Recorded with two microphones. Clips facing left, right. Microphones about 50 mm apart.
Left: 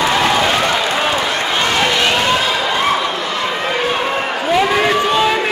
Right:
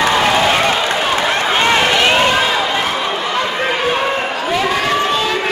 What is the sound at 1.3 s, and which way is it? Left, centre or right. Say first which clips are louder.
Run: right 3 dB; right.